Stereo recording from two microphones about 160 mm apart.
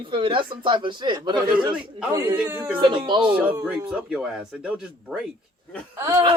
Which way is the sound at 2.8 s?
30° right (ahead or behind).